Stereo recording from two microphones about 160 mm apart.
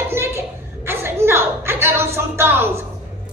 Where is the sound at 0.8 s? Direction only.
15° right (ahead or behind).